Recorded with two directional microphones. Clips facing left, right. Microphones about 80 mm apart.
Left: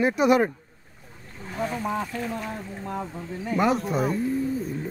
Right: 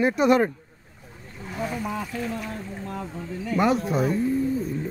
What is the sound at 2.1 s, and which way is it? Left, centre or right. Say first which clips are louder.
Speech: even; centre.